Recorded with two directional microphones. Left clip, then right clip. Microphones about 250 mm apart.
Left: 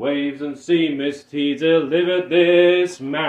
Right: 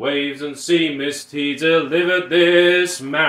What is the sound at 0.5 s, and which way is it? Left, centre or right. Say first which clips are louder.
Mantra: even; centre.